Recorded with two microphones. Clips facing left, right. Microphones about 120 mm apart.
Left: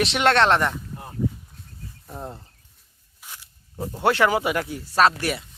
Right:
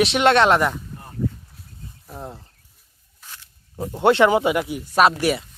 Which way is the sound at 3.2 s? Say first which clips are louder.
Even; 10° left (ahead or behind).